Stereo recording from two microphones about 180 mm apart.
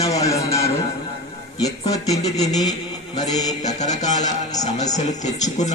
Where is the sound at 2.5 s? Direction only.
20° left (ahead or behind).